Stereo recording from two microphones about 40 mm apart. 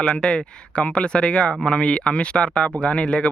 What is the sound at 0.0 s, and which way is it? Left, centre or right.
Speech, left.